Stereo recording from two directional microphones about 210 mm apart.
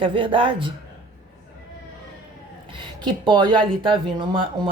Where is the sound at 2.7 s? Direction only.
20° right (ahead or behind).